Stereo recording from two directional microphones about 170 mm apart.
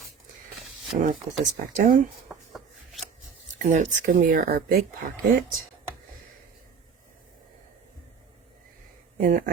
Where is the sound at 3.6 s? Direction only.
45° right (ahead or behind); by 4.8 s 65° right (ahead or behind).